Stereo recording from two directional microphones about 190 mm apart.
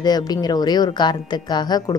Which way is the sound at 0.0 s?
20° left (ahead or behind).